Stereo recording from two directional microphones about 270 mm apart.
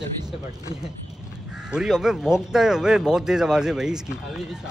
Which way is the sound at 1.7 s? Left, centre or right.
Centre.